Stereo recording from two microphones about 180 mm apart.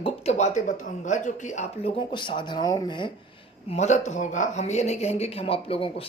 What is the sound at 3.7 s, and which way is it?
Speech, 40° left (ahead or behind).